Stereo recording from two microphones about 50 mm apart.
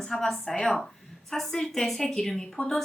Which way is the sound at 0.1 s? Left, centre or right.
Centre.